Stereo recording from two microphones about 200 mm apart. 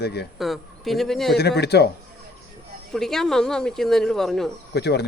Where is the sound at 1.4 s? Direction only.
55° left (ahead or behind).